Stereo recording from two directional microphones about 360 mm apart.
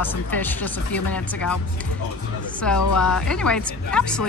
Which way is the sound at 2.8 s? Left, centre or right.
Left.